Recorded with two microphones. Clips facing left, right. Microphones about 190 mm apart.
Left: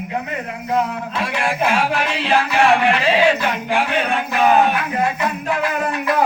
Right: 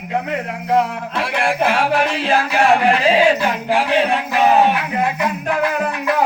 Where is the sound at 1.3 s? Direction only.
55° right (ahead or behind); by 3.7 s 40° right (ahead or behind).